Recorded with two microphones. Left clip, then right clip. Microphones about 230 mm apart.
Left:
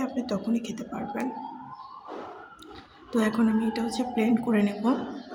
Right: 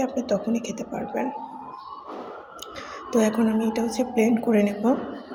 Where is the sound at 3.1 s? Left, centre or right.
Centre.